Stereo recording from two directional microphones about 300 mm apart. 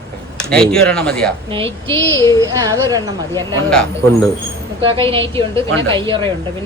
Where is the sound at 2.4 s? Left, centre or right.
Centre.